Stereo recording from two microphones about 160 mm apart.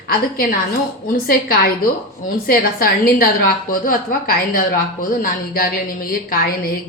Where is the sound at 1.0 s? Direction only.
65° left (ahead or behind).